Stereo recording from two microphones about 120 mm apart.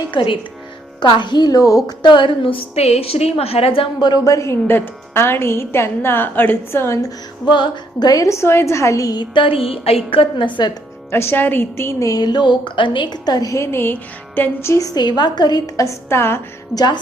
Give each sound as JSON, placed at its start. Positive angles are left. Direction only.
{"t": 0.1, "sound": "a woman's voice", "side_deg": 45}
{"t": 4.1, "sound": "a woman's voice", "side_deg": 30}
{"t": 7.4, "sound": "a woman's voice", "side_deg": 40}
{"t": 9.3, "sound": "a woman's voice", "side_deg": 45}
{"t": 11.1, "sound": "a woman's voice", "side_deg": 20}
{"t": 16.7, "sound": "speech", "side_deg": 35}